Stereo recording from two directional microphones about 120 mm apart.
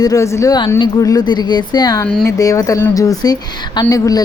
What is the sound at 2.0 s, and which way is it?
Speech, 10° left (ahead or behind).